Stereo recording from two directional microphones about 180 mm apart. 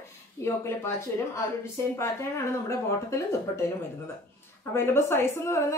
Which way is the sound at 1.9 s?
15° left (ahead or behind).